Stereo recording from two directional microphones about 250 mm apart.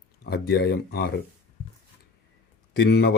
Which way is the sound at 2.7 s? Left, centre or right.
Left.